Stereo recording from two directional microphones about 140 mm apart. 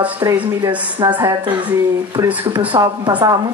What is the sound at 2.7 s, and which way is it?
Speech, 35° right (ahead or behind).